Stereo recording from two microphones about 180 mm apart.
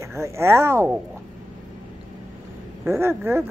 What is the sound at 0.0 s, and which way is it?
Speech, 15° right (ahead or behind).